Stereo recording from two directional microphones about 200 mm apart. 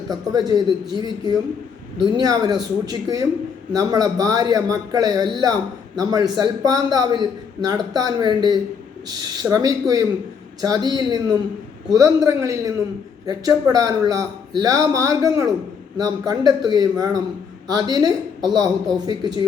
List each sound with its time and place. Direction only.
0.1 s a man's voice: 20° right (ahead or behind)